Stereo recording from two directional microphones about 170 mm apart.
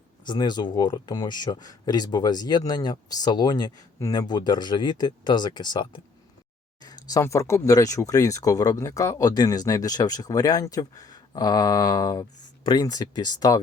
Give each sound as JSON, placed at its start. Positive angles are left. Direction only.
{"t": 0.3, "sound": "speech", "side_deg": 25}